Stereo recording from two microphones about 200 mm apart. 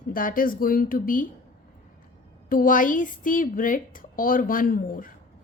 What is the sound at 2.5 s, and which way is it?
A woman's voice, 45° left (ahead or behind).